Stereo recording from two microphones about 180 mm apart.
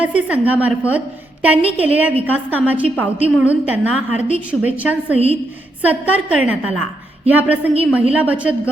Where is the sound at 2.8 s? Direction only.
30° right (ahead or behind).